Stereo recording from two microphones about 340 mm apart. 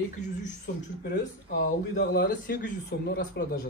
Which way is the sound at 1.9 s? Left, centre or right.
Left.